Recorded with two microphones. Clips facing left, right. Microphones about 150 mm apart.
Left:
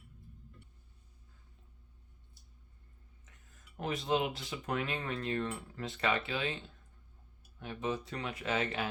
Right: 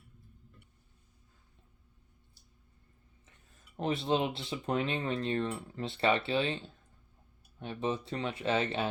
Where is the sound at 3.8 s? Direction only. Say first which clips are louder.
Right 3 dB; 30° right (ahead or behind).